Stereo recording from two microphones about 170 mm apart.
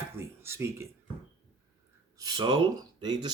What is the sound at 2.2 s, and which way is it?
Speech, 25° right (ahead or behind).